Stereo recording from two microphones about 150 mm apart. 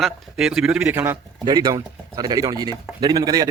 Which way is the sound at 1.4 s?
25° right (ahead or behind).